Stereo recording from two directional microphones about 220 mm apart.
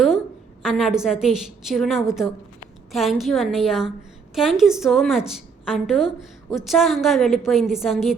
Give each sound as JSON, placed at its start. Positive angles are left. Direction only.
{"t": 0.6, "sound": "a woman's voice", "side_deg": 0}